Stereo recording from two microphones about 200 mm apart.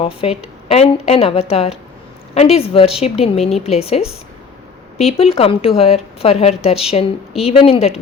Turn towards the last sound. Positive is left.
turn(degrees=30)  # may be behind; listen again after turning